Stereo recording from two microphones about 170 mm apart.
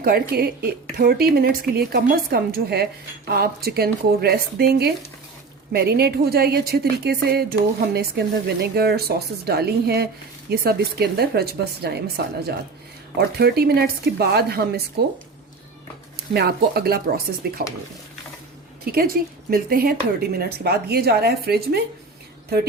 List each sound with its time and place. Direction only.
0.0 s speech: 65° right (ahead or behind)
8.6 s speech: 70° right (ahead or behind)
16.1 s speech: 70° right (ahead or behind)
18.9 s speech: 60° right (ahead or behind)